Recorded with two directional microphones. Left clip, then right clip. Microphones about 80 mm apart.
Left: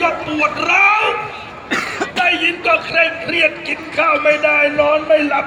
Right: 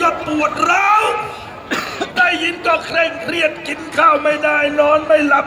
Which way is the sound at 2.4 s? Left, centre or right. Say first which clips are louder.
Left 1 dB; centre.